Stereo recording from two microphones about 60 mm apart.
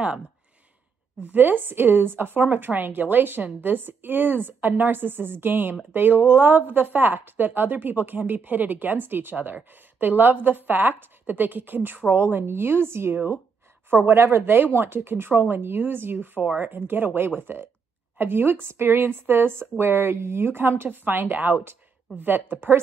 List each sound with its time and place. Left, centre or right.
1.3 s speech: right
16.3 s speech: right
16.6 s speech: right